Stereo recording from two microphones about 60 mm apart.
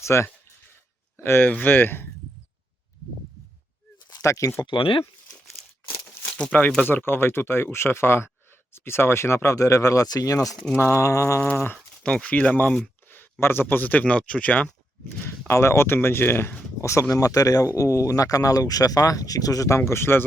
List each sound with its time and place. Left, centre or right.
0.0 s speech: left
1.1 s speech: left
4.2 s speech: left
6.8 s speech: left
10.8 s speech: left
12.0 s speech: centre
13.4 s speech: left
14.0 s speech: centre
15.2 s speech: left
16.8 s speech: left